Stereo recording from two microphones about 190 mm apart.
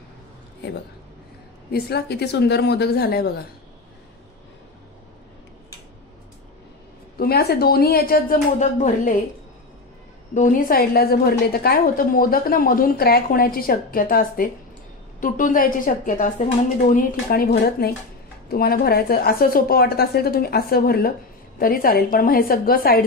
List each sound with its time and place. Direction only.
1.7 s speech: 55° left (ahead or behind)
7.2 s a woman's voice: 55° left (ahead or behind)
10.3 s a woman's voice: 45° left (ahead or behind)